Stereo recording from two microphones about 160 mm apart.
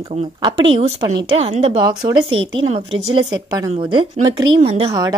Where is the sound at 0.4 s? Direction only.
30° right (ahead or behind).